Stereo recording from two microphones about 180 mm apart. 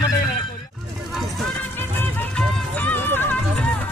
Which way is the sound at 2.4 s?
5° left (ahead or behind).